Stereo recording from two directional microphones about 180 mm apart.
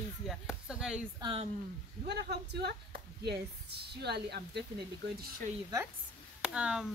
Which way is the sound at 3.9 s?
65° right (ahead or behind).